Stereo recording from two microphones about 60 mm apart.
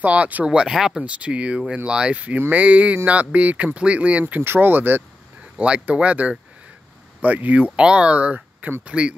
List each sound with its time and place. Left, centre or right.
0.0 s speech: right
0.5 s speech: centre
1.0 s speech: right
4.4 s speech: right
5.6 s speech: right